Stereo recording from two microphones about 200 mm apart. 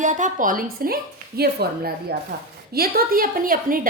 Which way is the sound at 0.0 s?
40° right (ahead or behind).